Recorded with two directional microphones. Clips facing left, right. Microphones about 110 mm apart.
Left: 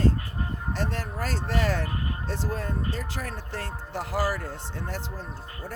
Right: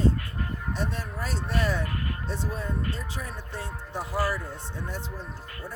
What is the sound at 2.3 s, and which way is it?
Speech, 90° left.